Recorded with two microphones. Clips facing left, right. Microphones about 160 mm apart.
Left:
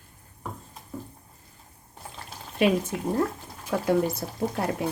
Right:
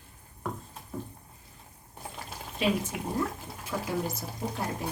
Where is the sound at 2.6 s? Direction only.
60° left (ahead or behind).